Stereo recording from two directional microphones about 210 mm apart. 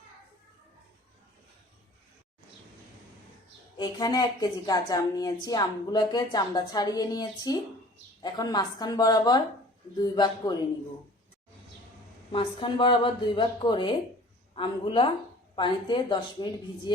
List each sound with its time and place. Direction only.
3.8 s a woman's voice: 20° left (ahead or behind)
12.3 s a woman's voice: 25° left (ahead or behind)